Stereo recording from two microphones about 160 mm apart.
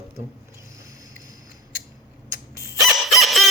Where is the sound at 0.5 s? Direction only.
20° right (ahead or behind).